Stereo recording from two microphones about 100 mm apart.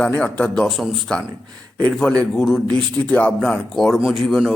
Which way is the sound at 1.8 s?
10° left (ahead or behind).